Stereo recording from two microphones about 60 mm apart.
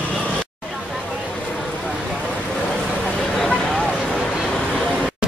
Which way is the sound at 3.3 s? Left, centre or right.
Centre.